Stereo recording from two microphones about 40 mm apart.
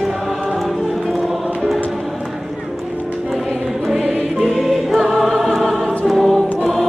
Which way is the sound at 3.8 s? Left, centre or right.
Centre.